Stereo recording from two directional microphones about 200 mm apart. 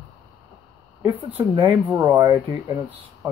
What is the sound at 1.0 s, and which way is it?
Speech, 10° right (ahead or behind).